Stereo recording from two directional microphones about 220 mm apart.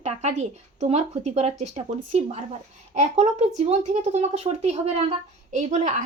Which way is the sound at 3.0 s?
30° right (ahead or behind).